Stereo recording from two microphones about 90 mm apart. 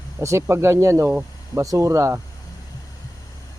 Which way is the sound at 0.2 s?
30° right (ahead or behind).